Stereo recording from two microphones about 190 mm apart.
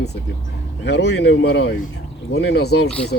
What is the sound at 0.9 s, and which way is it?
Speech, 65° left (ahead or behind).